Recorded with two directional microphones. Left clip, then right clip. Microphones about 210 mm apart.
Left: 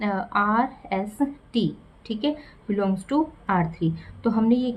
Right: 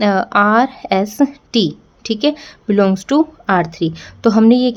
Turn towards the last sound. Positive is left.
turn(degrees=-50)  # may be behind; listen again after turning